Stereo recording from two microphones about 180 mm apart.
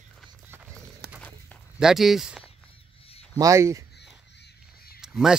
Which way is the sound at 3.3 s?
15° right (ahead or behind).